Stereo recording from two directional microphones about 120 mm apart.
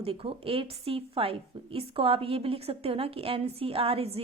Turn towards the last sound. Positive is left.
turn(degrees=-55)  # may be behind; listen again after turning